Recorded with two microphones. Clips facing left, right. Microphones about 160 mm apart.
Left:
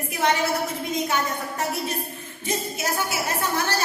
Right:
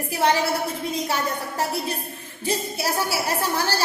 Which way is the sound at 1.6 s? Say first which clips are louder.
Right 1 dB; 35° right (ahead or behind).